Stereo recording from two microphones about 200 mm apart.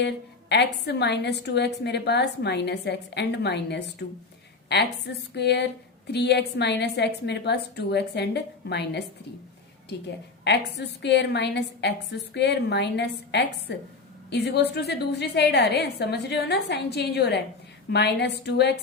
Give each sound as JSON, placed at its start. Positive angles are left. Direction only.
{"t": 0.0, "sound": "a woman's voice", "side_deg": 60}
{"t": 10.4, "sound": "a woman's voice", "side_deg": 60}